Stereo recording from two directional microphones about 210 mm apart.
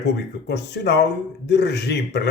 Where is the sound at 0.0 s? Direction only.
55° left (ahead or behind).